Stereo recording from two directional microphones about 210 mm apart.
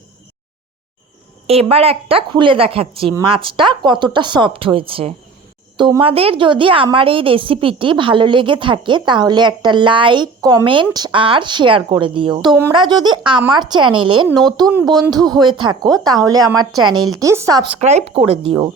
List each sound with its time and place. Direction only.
1.5 s a woman's voice: 30° right (ahead or behind)
16.6 s a woman's voice: 90° right
17.2 s speech: 15° right (ahead or behind)
17.7 s a woman's voice: 30° right (ahead or behind)